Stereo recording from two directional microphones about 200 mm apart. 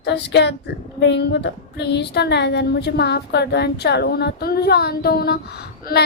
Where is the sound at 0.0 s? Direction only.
55° left (ahead or behind).